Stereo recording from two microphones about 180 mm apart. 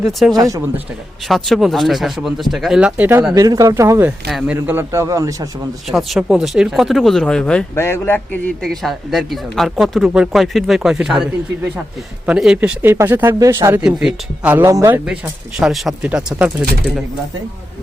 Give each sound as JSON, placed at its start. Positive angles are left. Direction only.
{"t": 0.3, "sound": "speech", "side_deg": -20}
{"t": 1.3, "sound": "speech", "side_deg": 0}
{"t": 4.3, "sound": "speech", "side_deg": 0}
{"t": 4.5, "sound": "speech", "side_deg": -10}
{"t": 5.9, "sound": "speech", "side_deg": 0}
{"t": 8.6, "sound": "speech", "side_deg": 0}
{"t": 15.0, "sound": "speech", "side_deg": -5}